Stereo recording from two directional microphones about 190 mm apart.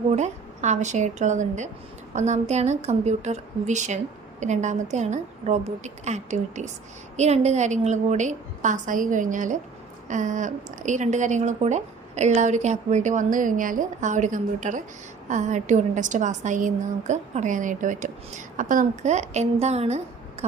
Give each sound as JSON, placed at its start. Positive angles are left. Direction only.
{"t": 0.2, "sound": "a woman's voice", "side_deg": -40}